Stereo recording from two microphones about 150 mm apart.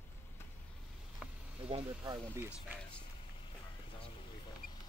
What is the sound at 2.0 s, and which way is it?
Speech, 20° right (ahead or behind).